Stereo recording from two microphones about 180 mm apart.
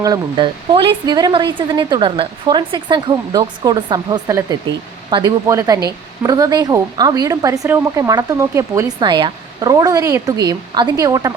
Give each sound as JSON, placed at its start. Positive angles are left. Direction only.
{"t": 0.0, "sound": "a woman's voice", "side_deg": -25}